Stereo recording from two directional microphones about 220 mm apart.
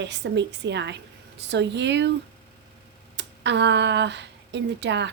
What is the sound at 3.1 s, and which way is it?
Speech, 50° right (ahead or behind).